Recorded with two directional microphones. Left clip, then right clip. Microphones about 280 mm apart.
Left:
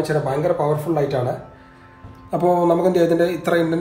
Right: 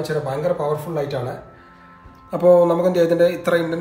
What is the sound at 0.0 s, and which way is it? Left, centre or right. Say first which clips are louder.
Speech: left 2 dB; left.